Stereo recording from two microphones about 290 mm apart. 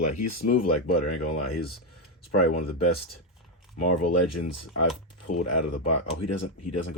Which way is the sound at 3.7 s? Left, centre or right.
Left.